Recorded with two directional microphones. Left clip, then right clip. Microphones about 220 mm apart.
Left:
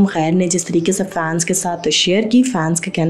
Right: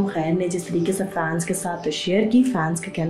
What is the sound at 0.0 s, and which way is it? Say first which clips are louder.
A woman's voice: left 6 dB; 45° left (ahead or behind).